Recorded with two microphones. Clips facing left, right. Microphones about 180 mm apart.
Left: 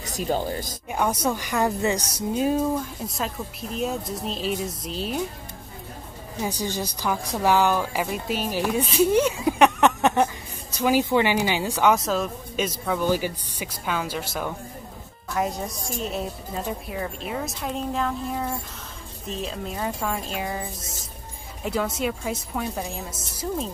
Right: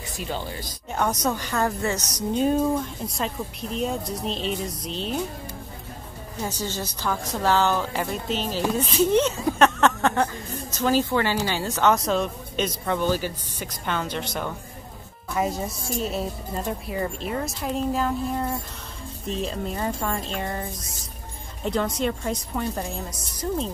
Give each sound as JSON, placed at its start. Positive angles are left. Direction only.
{"t": 0.0, "sound": "speech", "side_deg": 40}
{"t": 0.9, "sound": "a woman's voice", "side_deg": 10}
{"t": 2.3, "sound": "a woman's voice", "side_deg": 5}
{"t": 6.4, "sound": "a woman's voice", "side_deg": 15}
{"t": 21.6, "sound": "a woman's voice", "side_deg": 5}